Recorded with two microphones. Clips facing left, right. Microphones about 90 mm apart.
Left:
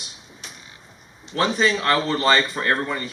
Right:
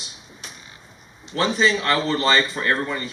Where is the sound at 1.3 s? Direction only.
50° left (ahead or behind).